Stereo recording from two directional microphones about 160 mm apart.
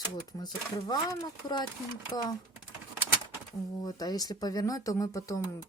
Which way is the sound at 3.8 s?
25° left (ahead or behind).